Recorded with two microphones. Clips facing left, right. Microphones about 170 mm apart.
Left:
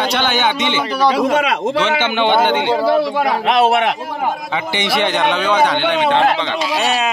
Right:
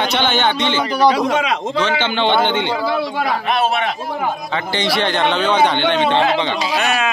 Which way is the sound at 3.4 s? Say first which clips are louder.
Left 7 dB; 70° left (ahead or behind).